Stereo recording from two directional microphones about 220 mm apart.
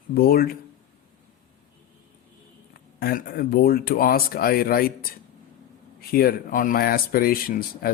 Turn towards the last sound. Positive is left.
turn(degrees=40)  # may be behind; listen again after turning